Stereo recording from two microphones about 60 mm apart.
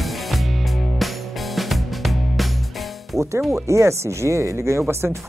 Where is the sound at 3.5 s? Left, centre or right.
Right.